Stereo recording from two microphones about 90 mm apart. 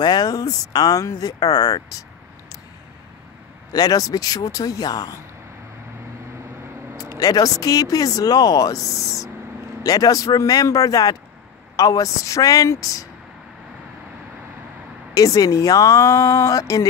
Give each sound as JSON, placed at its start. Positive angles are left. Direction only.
{"t": 0.0, "sound": "speech", "side_deg": 50}
{"t": 3.7, "sound": "speech", "side_deg": 45}
{"t": 7.2, "sound": "speech", "side_deg": 45}
{"t": 9.8, "sound": "speech", "side_deg": 40}
{"t": 15.1, "sound": "speech", "side_deg": 40}